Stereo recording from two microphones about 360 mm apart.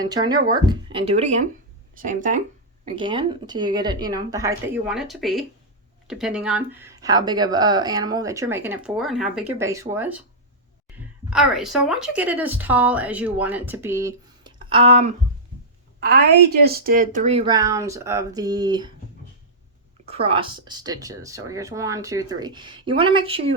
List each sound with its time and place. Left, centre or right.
0.0 s speech: centre
11.3 s speech: centre
20.1 s speech: centre